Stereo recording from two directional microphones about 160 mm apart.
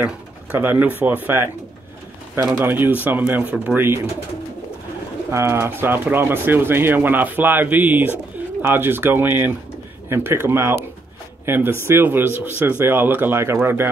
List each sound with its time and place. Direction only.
0.0 s speech: 10° right (ahead or behind)
5.3 s speech: 15° right (ahead or behind)